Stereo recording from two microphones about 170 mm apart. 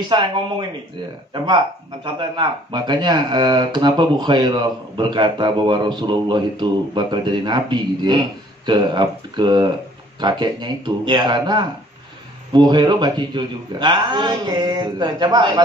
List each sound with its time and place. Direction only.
0.1 s speech: 25° right (ahead or behind)